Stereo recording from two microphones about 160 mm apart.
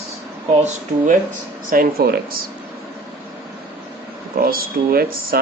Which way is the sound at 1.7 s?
65° right (ahead or behind).